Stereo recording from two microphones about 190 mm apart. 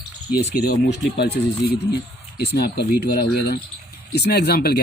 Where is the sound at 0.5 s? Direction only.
55° left (ahead or behind).